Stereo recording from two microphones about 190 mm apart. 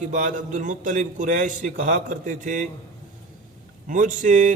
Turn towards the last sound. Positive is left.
turn(degrees=-45)  # may be behind; listen again after turning